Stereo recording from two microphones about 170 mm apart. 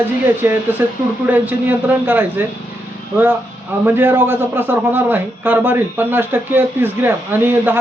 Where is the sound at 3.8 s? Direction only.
15° right (ahead or behind).